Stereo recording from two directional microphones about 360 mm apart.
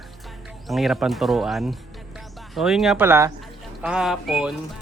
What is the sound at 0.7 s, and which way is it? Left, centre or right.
A man's voice, centre.